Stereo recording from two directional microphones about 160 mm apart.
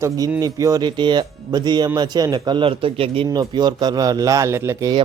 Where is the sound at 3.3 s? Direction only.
25° right (ahead or behind).